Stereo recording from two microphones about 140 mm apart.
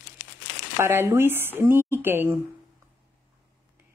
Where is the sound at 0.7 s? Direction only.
15° right (ahead or behind).